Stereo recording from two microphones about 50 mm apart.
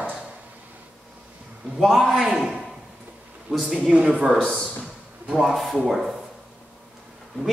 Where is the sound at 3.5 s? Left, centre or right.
Centre.